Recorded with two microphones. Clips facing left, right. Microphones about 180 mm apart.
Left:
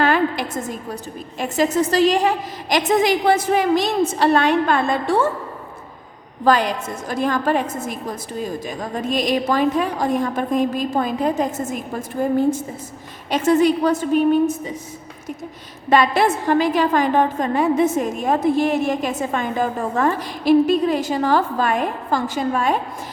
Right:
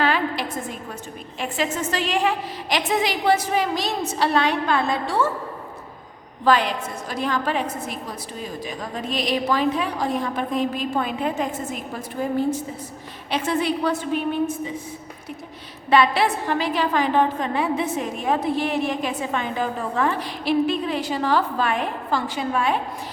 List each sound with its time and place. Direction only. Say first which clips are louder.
0.0 s a sound: left 4 dB; 45° left (ahead or behind)
1.4 s a woman's voice: left 7 dB; 40° left (ahead or behind)
6.4 s a woman's voice: left 2 dB; 45° left (ahead or behind)
15.9 s a woman's voice: left 2 dB; 45° left (ahead or behind)